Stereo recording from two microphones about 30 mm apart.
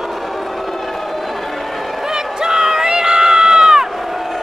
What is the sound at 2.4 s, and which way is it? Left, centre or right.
Crowd, centre.